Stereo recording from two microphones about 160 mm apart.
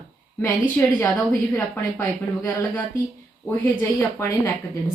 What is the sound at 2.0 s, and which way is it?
Speech, 15° left (ahead or behind).